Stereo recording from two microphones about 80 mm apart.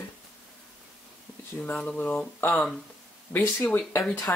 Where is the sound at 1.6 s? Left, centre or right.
Centre.